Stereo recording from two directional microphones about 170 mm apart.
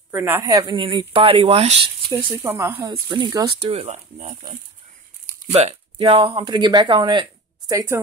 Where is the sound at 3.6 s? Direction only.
35° right (ahead or behind).